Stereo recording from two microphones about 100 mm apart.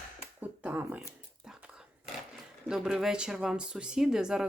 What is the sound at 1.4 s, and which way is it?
Whispering, 10° right (ahead or behind).